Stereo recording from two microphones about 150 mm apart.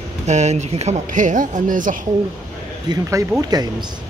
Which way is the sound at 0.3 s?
50° right (ahead or behind).